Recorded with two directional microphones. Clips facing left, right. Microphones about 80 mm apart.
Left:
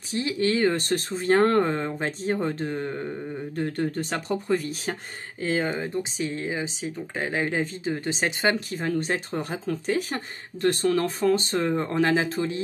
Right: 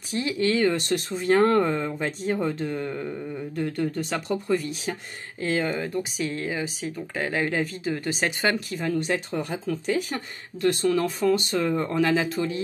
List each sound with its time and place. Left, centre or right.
0.1 s speech: left
5.6 s speech: left